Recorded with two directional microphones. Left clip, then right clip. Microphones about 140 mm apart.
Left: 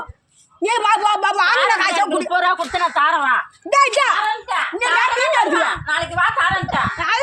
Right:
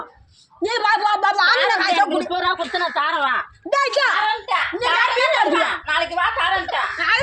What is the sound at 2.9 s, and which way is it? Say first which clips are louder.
Speech: left 5 dB; 20° right (ahead or behind).